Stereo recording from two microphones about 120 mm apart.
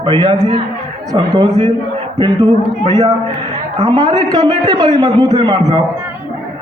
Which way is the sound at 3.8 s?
35° right (ahead or behind).